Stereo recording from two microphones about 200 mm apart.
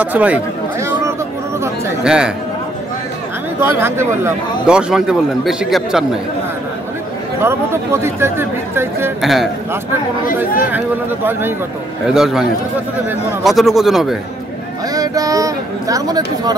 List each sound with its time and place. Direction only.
0.0 s speech: 10° right (ahead or behind)
3.6 s a man's voice: 10° right (ahead or behind)
7.3 s speech: 15° right (ahead or behind)
9.2 s a man's voice: centre (ahead or behind)
12.1 s a man's voice: centre (ahead or behind)
15.0 s speech: 15° right (ahead or behind)